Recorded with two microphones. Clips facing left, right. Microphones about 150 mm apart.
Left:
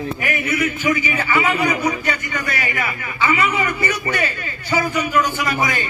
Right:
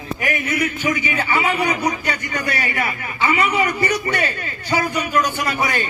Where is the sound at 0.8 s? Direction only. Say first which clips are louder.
Left 1 dB; 35° right (ahead or behind).